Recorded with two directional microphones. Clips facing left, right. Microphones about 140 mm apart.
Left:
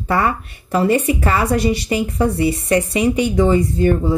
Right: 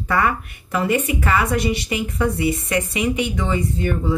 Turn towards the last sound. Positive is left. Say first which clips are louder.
# left 6 dB
turn(degrees=35)  # may be behind; listen again after turning